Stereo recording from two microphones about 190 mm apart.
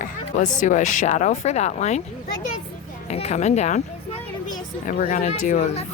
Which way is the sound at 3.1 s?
35° left (ahead or behind).